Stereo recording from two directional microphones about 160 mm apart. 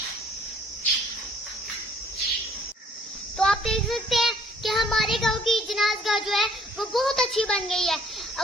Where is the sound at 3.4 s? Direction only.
Centre (ahead or behind).